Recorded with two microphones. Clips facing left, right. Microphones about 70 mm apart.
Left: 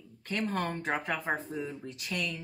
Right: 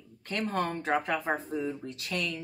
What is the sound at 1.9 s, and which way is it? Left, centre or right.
Speech, centre.